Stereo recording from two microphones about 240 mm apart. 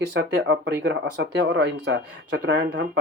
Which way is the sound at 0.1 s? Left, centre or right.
Right.